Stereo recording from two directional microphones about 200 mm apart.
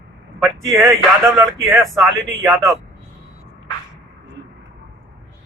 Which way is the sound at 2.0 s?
15° right (ahead or behind).